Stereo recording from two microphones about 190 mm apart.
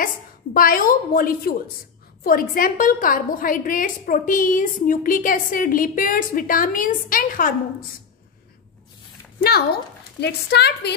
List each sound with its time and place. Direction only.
0.0 s a woman's voice: 50° left (ahead or behind)
10.2 s a woman's voice: 60° left (ahead or behind)